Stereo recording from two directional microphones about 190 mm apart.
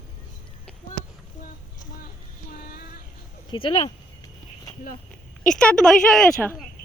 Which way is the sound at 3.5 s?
25° left (ahead or behind).